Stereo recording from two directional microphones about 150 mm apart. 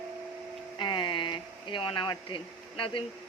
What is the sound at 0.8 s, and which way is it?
Speech, 30° left (ahead or behind).